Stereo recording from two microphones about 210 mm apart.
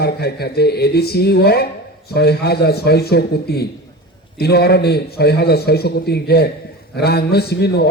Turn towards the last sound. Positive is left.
turn(degrees=50)  # may be behind; listen again after turning